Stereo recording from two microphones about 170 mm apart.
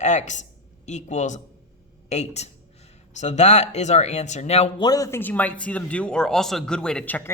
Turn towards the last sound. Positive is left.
turn(degrees=10)  # may be behind; listen again after turning